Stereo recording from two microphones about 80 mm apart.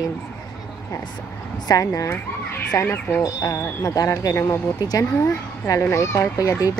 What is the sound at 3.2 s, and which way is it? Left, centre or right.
Speech, left.